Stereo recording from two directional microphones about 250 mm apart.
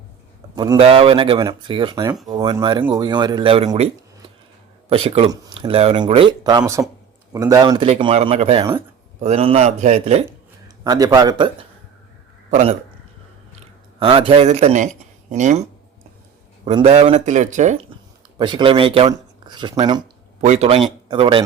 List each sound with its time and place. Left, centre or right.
0.5 s speech: centre
10.8 s a man's voice: centre
16.6 s speech: right
20.4 s speech: right